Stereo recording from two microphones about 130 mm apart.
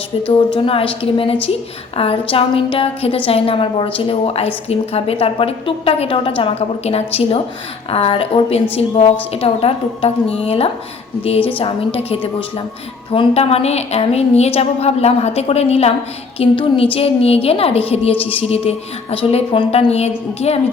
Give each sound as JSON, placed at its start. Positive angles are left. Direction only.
{"t": 0.3, "sound": "a woman's voice", "side_deg": 40}